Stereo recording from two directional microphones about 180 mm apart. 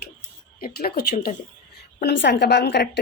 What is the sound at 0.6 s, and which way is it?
A woman's voice, 60° left (ahead or behind).